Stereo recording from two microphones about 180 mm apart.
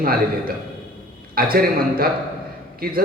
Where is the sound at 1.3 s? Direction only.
55° right (ahead or behind).